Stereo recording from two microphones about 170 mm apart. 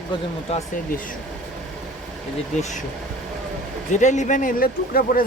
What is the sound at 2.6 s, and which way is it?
Speech, 45° left (ahead or behind).